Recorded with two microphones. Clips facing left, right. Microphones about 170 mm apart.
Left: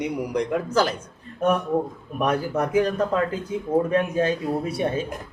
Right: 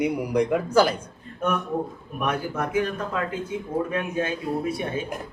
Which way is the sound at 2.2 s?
40° left (ahead or behind).